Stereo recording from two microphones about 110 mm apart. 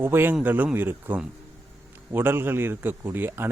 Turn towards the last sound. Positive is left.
turn(degrees=-20)  # may be behind; listen again after turning